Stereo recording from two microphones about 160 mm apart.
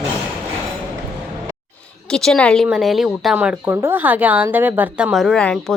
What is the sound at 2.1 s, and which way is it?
A woman's voice, 5° left (ahead or behind).